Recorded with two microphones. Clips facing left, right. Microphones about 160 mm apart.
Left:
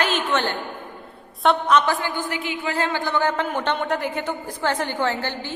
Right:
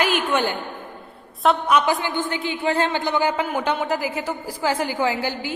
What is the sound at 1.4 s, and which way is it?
A woman's voice, 5° right (ahead or behind).